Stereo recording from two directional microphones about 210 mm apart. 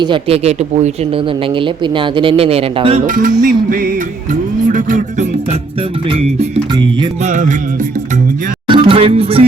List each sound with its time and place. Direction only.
0.0 s speech: 25° right (ahead or behind)
3.1 s speech: 40° right (ahead or behind)
3.4 s music: 40° right (ahead or behind)
6.1 s speech: 30° right (ahead or behind)
8.6 s speech: 25° right (ahead or behind)